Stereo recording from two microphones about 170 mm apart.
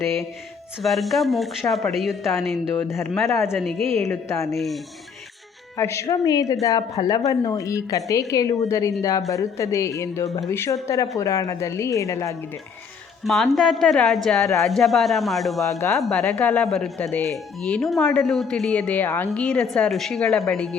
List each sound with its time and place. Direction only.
0.8 s speech: centre (ahead or behind)
3.2 s a woman's voice: 15° left (ahead or behind)
3.5 s speech: centre (ahead or behind)
3.9 s a woman's voice: 15° left (ahead or behind)
4.5 s speech: centre (ahead or behind)
5.7 s a woman's voice: 15° left (ahead or behind)
13.2 s speech: centre (ahead or behind)